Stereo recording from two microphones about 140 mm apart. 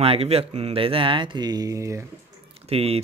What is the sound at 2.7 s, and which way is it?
Speech, 45° right (ahead or behind).